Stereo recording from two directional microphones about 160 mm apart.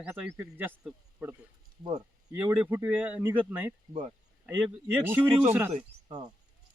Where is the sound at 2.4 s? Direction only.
10° right (ahead or behind).